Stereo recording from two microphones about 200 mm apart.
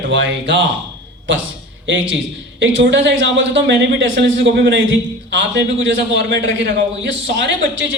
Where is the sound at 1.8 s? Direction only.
65° right (ahead or behind).